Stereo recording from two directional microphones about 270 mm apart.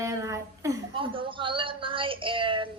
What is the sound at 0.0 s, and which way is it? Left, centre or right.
A woman's voice, centre.